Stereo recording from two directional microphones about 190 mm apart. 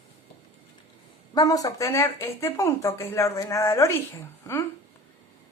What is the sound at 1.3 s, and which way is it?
Speech, 20° left (ahead or behind).